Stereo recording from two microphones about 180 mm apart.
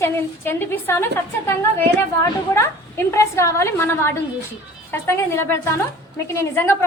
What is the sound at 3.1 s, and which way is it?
A woman's voice, 15° left (ahead or behind).